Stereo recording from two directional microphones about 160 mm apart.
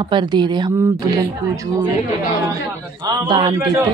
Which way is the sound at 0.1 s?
30° right (ahead or behind).